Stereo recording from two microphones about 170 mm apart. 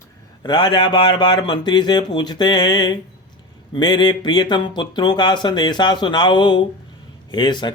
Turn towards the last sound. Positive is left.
turn(degrees=25)  # may be behind; listen again after turning